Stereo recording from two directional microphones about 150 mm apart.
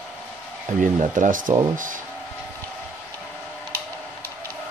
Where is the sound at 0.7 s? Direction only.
60° right (ahead or behind).